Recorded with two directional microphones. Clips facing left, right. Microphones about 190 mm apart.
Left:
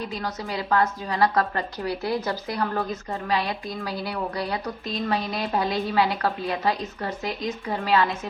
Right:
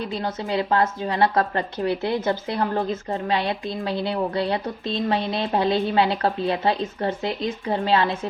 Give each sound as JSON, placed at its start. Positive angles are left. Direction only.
{"t": 0.5, "sound": "a woman's voice", "side_deg": -30}